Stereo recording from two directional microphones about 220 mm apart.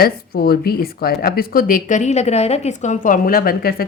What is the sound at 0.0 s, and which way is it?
Speech, 45° left (ahead or behind).